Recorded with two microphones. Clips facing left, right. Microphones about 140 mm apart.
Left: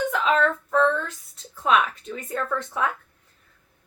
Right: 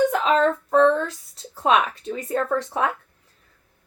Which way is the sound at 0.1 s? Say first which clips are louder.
Right 3 dB; 40° right (ahead or behind).